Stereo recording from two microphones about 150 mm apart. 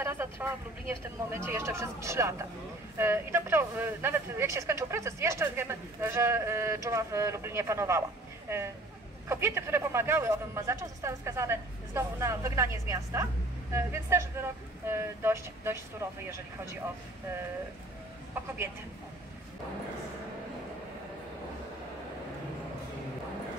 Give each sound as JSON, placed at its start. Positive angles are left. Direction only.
{"t": 0.0, "sound": "speech", "side_deg": -15}
{"t": 9.3, "sound": "speech", "side_deg": -15}